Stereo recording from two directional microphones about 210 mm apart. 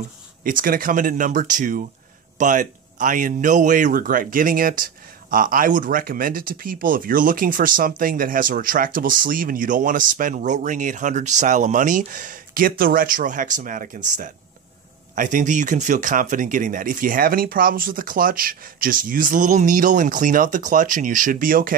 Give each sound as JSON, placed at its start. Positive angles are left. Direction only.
{"t": 0.4, "sound": "speech", "side_deg": -40}